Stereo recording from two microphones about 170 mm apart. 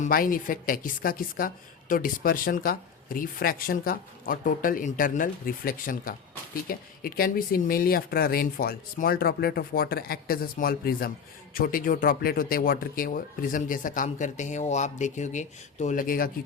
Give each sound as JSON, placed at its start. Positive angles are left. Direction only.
{"t": 0.0, "sound": "a woman's voice", "side_deg": 55}